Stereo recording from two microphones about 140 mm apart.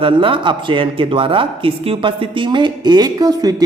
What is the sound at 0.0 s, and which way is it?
Speech, 40° right (ahead or behind).